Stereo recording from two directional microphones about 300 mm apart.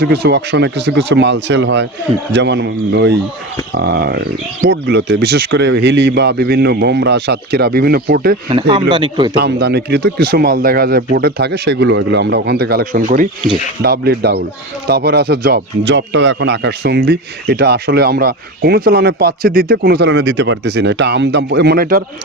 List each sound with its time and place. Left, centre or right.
0.0 s speech: right
8.4 s speech: centre
9.3 s speech: right